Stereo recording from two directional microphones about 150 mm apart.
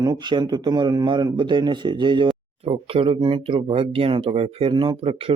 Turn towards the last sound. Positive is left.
turn(degrees=-35)  # may be behind; listen again after turning